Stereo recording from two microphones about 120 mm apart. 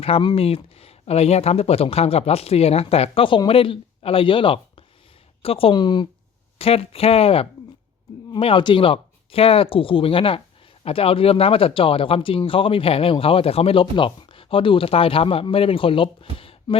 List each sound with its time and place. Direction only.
0.2 s speech: 40° left (ahead or behind)
0.4 s speech: 55° left (ahead or behind); by 6.1 s 40° left (ahead or behind)
6.6 s speech: 55° left (ahead or behind)